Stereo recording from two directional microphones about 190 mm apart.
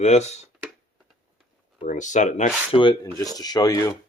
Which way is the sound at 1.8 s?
40° left (ahead or behind).